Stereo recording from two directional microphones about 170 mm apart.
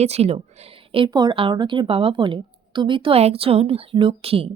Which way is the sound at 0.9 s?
25° right (ahead or behind).